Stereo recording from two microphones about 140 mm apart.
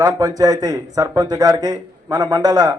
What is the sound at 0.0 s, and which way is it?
A man's voice, 25° right (ahead or behind).